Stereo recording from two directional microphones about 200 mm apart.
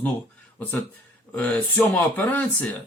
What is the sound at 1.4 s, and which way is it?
Speech, 5° left (ahead or behind).